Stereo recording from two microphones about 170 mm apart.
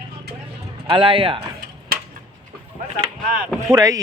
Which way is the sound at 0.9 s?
30° right (ahead or behind).